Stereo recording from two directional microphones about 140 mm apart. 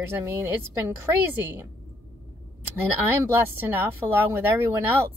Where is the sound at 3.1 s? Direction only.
15° right (ahead or behind).